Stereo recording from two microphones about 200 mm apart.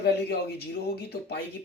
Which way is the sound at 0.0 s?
55° left (ahead or behind).